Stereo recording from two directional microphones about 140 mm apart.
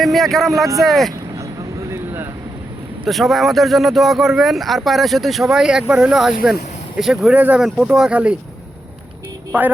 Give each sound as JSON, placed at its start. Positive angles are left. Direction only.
{"t": 0.0, "sound": "speech", "side_deg": 0}
{"t": 0.6, "sound": "speech", "side_deg": -25}
{"t": 0.9, "sound": "speech", "side_deg": 0}
{"t": 3.0, "sound": "speech", "side_deg": 0}
{"t": 9.5, "sound": "music", "side_deg": -15}